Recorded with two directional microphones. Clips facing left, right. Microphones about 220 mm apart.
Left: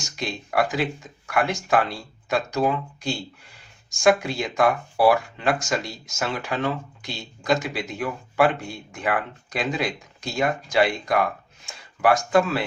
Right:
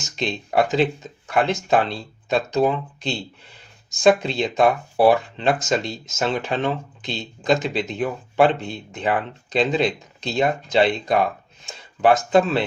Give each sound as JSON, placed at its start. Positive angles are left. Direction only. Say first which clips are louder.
{"t": 0.0, "sound": "speech", "louder": "right 4 dB", "side_deg": -25}